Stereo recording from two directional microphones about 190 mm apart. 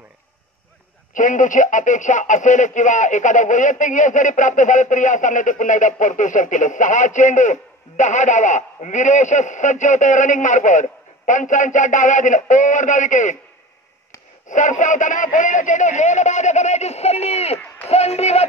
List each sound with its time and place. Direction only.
1.1 s speech: 45° left (ahead or behind)
14.5 s speech: 40° left (ahead or behind)